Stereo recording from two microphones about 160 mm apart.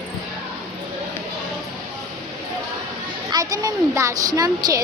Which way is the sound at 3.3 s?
25° right (ahead or behind).